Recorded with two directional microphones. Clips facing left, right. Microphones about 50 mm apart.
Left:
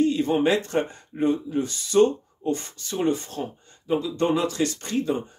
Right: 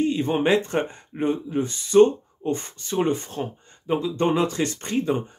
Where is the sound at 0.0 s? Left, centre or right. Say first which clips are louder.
Left 1 dB; right.